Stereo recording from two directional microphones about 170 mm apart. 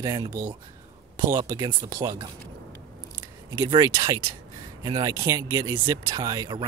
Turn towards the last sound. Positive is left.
turn(degrees=-25)  # may be behind; listen again after turning